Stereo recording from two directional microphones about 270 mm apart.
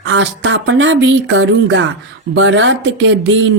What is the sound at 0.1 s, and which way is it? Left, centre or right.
Speech, right.